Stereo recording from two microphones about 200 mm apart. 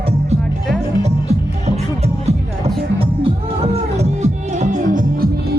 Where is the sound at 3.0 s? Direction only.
30° right (ahead or behind).